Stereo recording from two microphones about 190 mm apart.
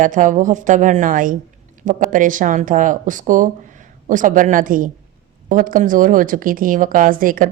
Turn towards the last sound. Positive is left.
turn(degrees=-45)  # may be behind; listen again after turning